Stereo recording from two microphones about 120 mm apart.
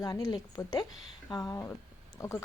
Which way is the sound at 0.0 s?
30° left (ahead or behind).